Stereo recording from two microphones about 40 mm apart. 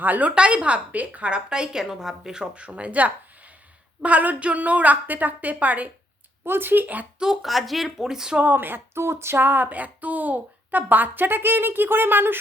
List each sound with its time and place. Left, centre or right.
0.0 s speech: right
0.3 s a woman's voice: right
1.5 s a woman's voice: right
1.8 s speech: centre
2.6 s a woman's voice: right
6.4 s speech: right
6.8 s speech: right
7.4 s speech: centre
8.5 s a sound: right